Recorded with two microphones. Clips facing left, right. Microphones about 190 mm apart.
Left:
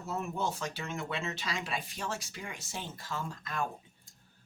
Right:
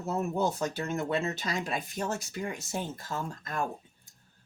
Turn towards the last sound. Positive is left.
turn(degrees=-45)  # may be behind; listen again after turning